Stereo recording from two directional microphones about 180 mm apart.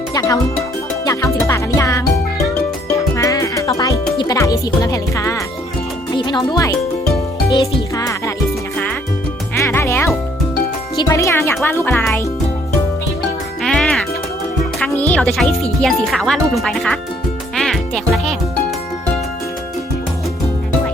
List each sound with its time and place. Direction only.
0.1 s music: 20° left (ahead or behind)
3.2 s music: 20° left (ahead or behind)
9.6 s music: 15° left (ahead or behind)
10.9 s speech: 20° left (ahead or behind)
13.6 s music: 5° left (ahead or behind)
15.8 s speech: centre (ahead or behind)
17.6 s music: centre (ahead or behind)